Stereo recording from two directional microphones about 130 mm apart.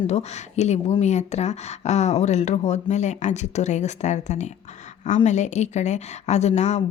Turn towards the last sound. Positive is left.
turn(degrees=60)  # may be behind; listen again after turning